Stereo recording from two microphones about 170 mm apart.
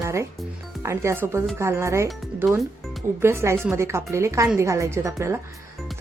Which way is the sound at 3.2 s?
15° right (ahead or behind).